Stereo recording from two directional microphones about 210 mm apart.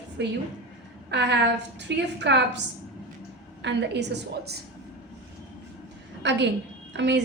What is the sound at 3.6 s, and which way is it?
A woman's voice, 55° right (ahead or behind).